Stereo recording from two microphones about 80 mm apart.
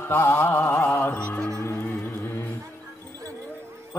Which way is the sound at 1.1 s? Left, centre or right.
Centre.